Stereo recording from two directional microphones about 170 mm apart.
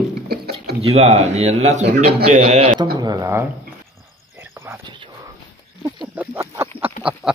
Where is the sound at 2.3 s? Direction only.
40° right (ahead or behind).